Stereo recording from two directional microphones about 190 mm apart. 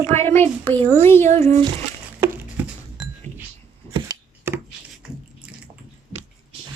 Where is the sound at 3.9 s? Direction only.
15° right (ahead or behind).